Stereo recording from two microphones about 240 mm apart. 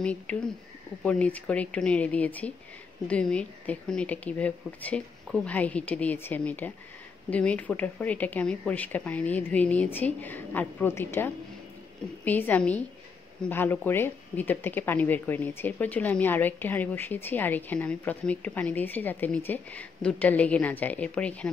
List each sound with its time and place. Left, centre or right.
0.0 s speech: centre